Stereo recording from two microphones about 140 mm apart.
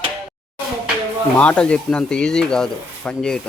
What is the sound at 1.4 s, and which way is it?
Speech, 10° left (ahead or behind).